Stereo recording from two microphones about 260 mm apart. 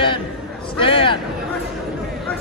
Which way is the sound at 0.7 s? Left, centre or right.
Centre.